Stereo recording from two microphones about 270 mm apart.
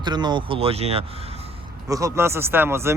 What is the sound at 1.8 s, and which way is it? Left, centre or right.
Speech, centre.